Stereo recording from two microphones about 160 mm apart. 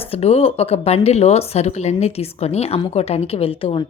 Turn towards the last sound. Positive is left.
turn(degrees=35)  # may be behind; listen again after turning